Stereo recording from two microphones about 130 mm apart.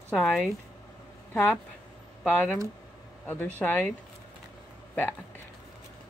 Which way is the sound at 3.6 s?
15° left (ahead or behind).